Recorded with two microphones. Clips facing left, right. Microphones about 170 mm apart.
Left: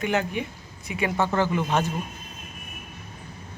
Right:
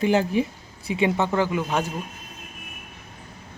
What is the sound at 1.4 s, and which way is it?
Speech, 10° right (ahead or behind).